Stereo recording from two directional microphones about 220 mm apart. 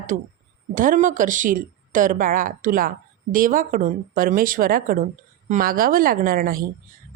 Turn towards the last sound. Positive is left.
turn(degrees=-40)  # may be behind; listen again after turning